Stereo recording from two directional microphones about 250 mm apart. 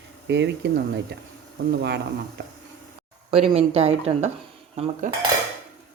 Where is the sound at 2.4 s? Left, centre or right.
Right.